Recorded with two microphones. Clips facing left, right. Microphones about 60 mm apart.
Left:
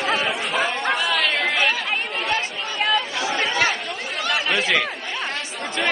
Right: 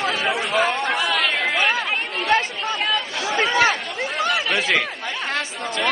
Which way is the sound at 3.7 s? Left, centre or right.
Centre.